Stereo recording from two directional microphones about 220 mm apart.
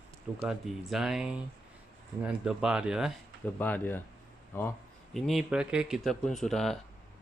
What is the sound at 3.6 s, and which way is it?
Speech, 10° left (ahead or behind).